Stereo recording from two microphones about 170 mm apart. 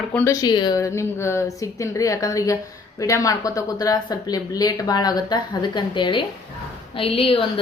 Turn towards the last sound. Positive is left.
turn(degrees=35)  # may be behind; listen again after turning